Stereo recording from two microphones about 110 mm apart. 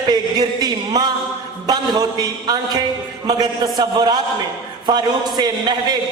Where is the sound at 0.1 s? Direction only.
40° right (ahead or behind).